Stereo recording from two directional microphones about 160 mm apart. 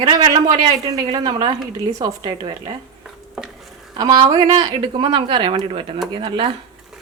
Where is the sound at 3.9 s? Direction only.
25° right (ahead or behind).